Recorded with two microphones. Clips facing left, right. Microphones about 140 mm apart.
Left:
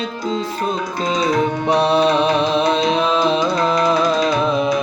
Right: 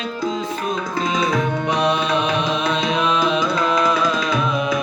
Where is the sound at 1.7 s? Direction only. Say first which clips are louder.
Left 6 dB; 35° left (ahead or behind).